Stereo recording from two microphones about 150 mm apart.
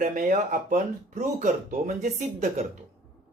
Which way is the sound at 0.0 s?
60° right (ahead or behind).